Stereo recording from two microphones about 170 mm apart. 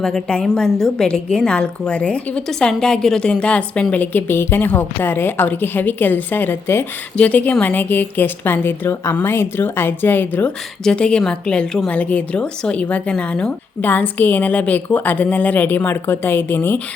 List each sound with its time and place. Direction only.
0.0 s a woman's voice: 5° left (ahead or behind)